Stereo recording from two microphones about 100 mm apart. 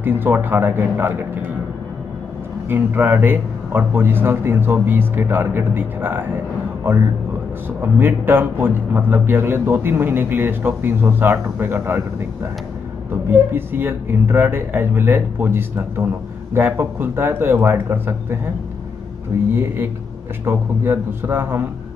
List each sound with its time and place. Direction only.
0.0 s a man's voice: 20° right (ahead or behind)
2.7 s a man's voice: 20° right (ahead or behind)
13.1 s a man's voice: 20° right (ahead or behind)
19.5 s a man's voice: 25° right (ahead or behind)